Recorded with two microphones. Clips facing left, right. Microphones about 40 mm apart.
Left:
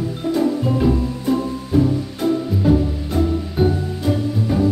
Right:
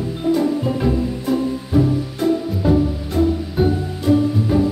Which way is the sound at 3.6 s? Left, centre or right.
Centre.